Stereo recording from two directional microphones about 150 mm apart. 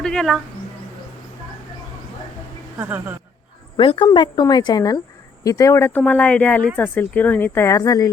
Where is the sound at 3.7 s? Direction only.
35° left (ahead or behind).